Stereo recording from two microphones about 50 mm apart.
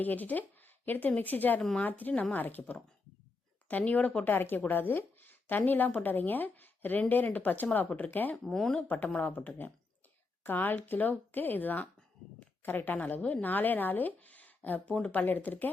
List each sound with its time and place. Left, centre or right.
0.0 s speech: left
4.2 s speech: left
8.4 s speech: centre
9.2 s a woman's voice: left